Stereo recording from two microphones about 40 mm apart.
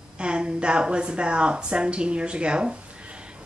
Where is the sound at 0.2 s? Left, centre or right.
Right.